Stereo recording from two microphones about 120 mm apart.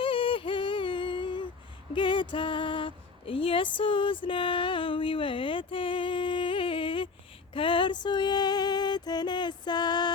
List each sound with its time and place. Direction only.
0.0 s a sound: 45° left (ahead or behind)
2.0 s speech: 40° left (ahead or behind)
7.5 s music: 45° left (ahead or behind)